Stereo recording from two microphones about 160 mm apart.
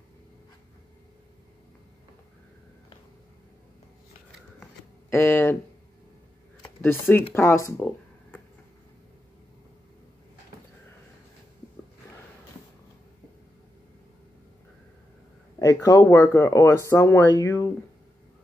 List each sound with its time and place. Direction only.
5.1 s speech: 15° left (ahead or behind)
6.8 s speech: 15° left (ahead or behind)
15.6 s speech: 20° left (ahead or behind)